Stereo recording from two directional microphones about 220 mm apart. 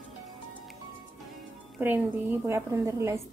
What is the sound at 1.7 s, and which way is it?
A woman's voice, 5° right (ahead or behind).